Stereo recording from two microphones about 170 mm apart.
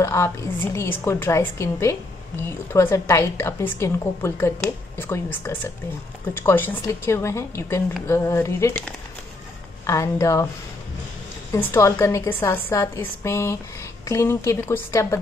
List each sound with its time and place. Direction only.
0.0 s a woman's voice: 15° left (ahead or behind)
9.8 s a woman's voice: 15° left (ahead or behind)
11.5 s a woman's voice: 15° left (ahead or behind)